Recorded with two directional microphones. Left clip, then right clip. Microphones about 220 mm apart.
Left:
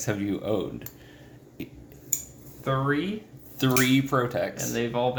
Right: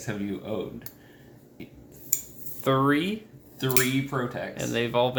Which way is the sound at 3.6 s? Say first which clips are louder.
Left 3 dB; 50° left (ahead or behind).